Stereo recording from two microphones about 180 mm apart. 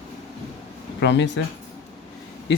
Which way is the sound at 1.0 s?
75° left (ahead or behind).